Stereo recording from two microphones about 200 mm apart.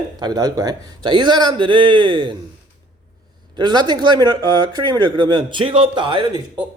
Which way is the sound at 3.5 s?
20° right (ahead or behind).